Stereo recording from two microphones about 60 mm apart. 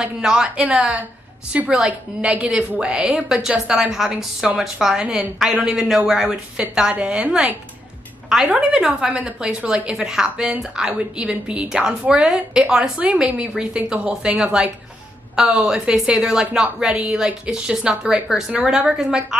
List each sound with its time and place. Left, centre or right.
0.0 s a woman's voice: centre
8.5 s a woman's voice: centre